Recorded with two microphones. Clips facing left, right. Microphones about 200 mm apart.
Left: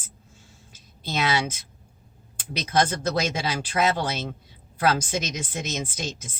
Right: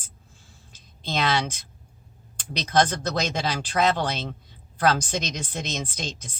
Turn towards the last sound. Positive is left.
turn(degrees=5)  # may be behind; listen again after turning